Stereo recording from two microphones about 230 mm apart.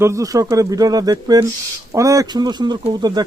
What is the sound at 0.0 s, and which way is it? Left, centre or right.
Speech, centre.